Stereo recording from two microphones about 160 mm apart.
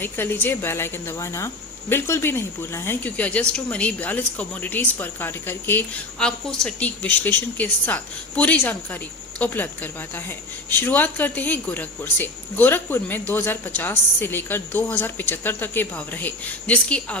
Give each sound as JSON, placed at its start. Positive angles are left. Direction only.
{"t": 0.0, "sound": "a woman's voice", "side_deg": 15}